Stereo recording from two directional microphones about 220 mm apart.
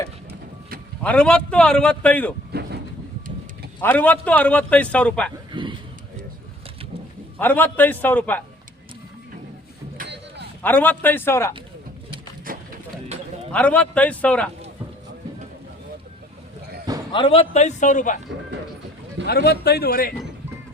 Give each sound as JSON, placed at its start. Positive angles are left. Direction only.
{"t": 1.0, "sound": "a man's voice", "side_deg": 5}
{"t": 2.5, "sound": "vehicle", "side_deg": -50}
{"t": 3.8, "sound": "a man's voice", "side_deg": 5}
{"t": 5.5, "sound": "a sound", "side_deg": -20}
{"t": 7.3, "sound": "a man's voice", "side_deg": 10}
{"t": 10.0, "sound": "a sound", "side_deg": -50}
{"t": 10.6, "sound": "a man's voice", "side_deg": 10}
{"t": 12.5, "sound": "a sound", "side_deg": -40}
{"t": 13.5, "sound": "a man's voice", "side_deg": 5}
{"t": 17.1, "sound": "a man's voice", "side_deg": 25}
{"t": 19.2, "sound": "speech", "side_deg": 45}